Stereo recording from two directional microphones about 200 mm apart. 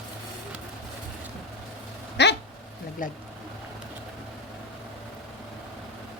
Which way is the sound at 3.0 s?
40° left (ahead or behind).